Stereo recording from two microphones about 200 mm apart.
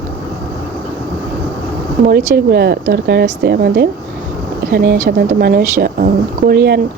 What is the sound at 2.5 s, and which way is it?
A woman's voice, 50° right (ahead or behind).